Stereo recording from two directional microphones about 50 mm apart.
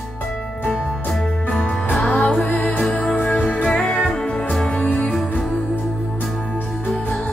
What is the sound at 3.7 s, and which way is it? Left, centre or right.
Music, centre.